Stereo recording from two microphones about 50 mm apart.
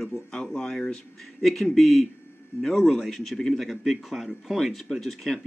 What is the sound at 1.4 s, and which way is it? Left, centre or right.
Speech, centre.